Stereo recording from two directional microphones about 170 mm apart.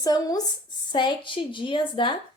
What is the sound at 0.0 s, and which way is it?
Speech, 20° left (ahead or behind).